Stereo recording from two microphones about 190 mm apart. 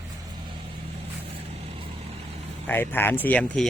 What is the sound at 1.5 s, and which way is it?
Vehicle, 30° right (ahead or behind).